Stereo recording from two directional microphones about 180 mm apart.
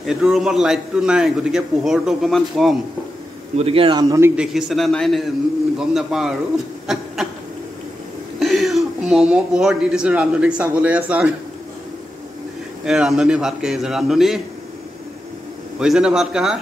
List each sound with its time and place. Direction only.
0.0 s a man's voice: centre (ahead or behind)
3.5 s speech: 30° right (ahead or behind)
4.4 s a man's voice: 5° right (ahead or behind)
8.4 s speech: centre (ahead or behind)
12.8 s a man's voice: 5° right (ahead or behind)
15.8 s a man's voice: 5° right (ahead or behind)